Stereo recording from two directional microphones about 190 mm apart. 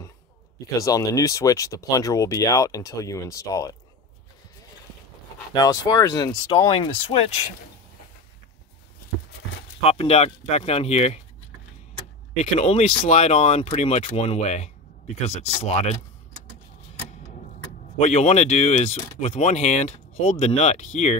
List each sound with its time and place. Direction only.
0.7 s speech: 15° left (ahead or behind)
5.5 s speech: 20° left (ahead or behind)
9.8 s speech: 30° left (ahead or behind)
12.5 s speech: 35° left (ahead or behind)
17.9 s speech: 35° left (ahead or behind)